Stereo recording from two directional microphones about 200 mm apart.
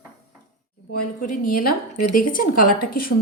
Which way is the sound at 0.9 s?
45° left (ahead or behind).